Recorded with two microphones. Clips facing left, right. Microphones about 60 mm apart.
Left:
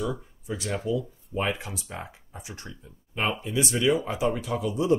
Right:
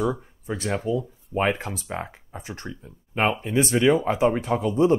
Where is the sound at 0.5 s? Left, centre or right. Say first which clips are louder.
Right 3 dB; right.